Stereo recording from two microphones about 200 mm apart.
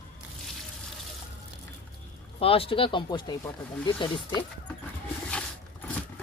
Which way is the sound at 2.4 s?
30° left (ahead or behind).